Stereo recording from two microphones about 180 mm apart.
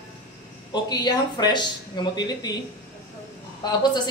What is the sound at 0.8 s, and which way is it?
A woman's voice, 25° left (ahead or behind).